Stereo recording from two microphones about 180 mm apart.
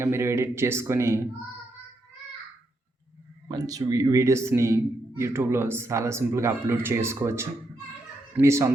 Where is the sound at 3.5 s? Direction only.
20° right (ahead or behind).